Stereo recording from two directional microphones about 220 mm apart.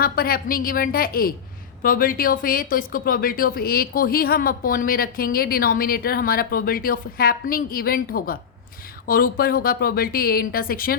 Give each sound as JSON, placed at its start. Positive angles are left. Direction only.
{"t": 0.0, "sound": "a woman's voice", "side_deg": 45}